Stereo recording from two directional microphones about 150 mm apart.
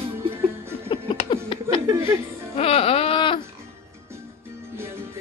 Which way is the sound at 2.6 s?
40° left (ahead or behind).